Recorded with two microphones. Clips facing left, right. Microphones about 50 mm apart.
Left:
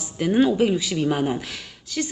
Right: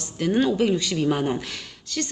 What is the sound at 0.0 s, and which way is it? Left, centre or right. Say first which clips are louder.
Speech: left 2 dB; centre.